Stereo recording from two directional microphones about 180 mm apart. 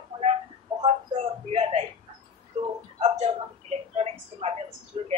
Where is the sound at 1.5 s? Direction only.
35° right (ahead or behind).